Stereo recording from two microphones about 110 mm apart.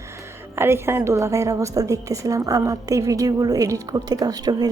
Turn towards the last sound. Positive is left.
turn(degrees=-35)  # may be behind; listen again after turning